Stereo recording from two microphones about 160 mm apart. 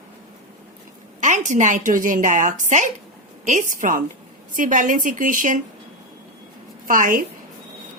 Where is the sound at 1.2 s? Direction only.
50° right (ahead or behind).